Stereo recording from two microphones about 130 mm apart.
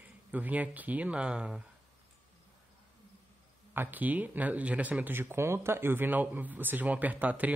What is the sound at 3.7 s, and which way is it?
Speech, 15° right (ahead or behind).